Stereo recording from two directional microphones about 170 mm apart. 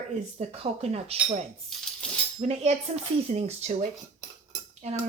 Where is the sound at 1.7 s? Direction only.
Centre (ahead or behind).